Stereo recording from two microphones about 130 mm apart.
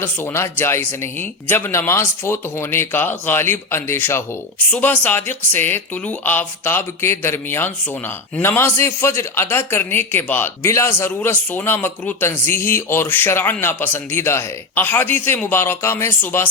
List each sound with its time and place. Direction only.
0.0 s speech: 20° left (ahead or behind)